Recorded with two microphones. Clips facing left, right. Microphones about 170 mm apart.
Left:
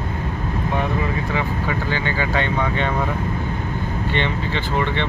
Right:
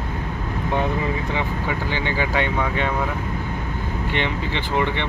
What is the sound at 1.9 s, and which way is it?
Speech, 15° right (ahead or behind).